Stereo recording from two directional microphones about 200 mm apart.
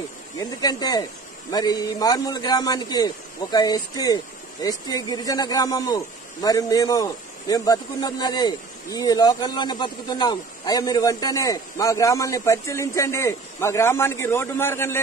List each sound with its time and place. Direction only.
0.4 s a man's voice: 20° left (ahead or behind)